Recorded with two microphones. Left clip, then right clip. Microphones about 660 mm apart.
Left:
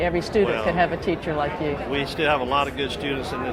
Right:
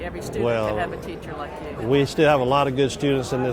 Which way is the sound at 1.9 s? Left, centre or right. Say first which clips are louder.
Right 6 dB; right.